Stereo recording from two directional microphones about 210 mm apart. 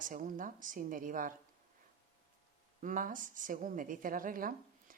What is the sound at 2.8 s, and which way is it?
Speech, 40° right (ahead or behind).